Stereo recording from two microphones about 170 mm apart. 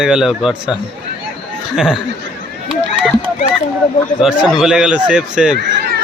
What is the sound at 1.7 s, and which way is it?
Speech, 5° right (ahead or behind).